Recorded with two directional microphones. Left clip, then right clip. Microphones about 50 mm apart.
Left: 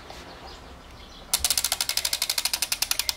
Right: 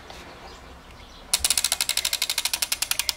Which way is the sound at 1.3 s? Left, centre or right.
Centre.